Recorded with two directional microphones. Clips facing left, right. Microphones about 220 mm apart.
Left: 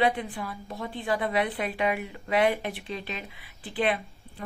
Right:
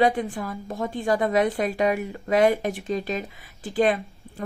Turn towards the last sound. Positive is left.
turn(degrees=-45)  # may be behind; listen again after turning